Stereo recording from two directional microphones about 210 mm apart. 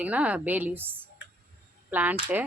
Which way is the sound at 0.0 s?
5° right (ahead or behind).